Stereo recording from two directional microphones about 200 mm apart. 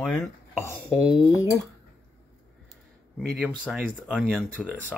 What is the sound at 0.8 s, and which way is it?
Speech, 5° right (ahead or behind).